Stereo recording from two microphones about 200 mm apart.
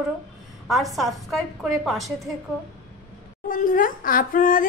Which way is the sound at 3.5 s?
40° left (ahead or behind).